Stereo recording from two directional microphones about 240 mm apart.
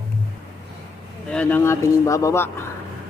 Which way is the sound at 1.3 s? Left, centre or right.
Centre.